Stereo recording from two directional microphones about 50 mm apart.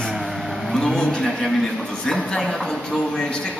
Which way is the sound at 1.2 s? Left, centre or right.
Centre.